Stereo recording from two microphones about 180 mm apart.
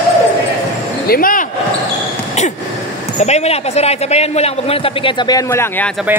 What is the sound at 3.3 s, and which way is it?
A man's voice, 35° left (ahead or behind).